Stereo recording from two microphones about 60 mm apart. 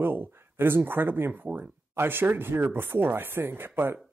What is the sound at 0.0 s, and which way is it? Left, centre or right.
Speech, right.